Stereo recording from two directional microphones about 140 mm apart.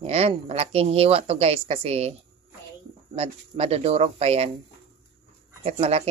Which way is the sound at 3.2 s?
50° right (ahead or behind).